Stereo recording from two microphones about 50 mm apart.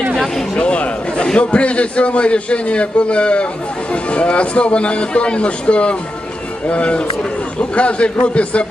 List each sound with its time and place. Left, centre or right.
0.5 s a man's voice: left